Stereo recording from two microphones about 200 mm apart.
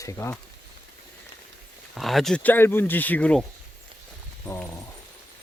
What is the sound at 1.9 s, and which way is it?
Speech, centre (ahead or behind).